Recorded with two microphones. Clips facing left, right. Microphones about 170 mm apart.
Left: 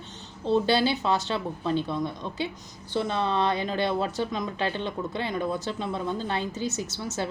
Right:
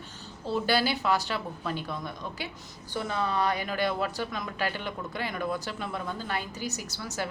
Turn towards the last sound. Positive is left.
turn(degrees=20)  # may be behind; listen again after turning